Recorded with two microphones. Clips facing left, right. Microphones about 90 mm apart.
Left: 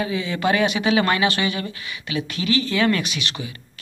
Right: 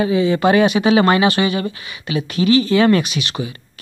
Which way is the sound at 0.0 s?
30° right (ahead or behind).